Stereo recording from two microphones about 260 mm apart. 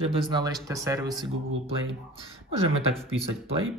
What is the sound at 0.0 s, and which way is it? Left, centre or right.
Speech, centre.